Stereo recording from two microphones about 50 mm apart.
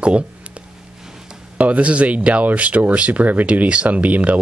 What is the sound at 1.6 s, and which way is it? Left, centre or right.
Speech, right.